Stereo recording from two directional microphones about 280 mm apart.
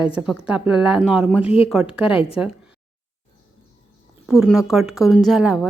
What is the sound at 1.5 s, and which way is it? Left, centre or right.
Speech, left.